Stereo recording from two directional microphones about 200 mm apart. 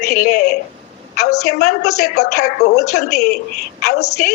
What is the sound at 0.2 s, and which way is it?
Speech, 45° left (ahead or behind).